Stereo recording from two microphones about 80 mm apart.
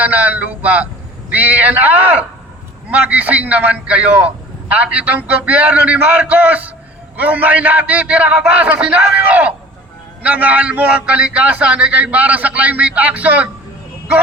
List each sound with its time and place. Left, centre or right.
0.0 s a man's voice: centre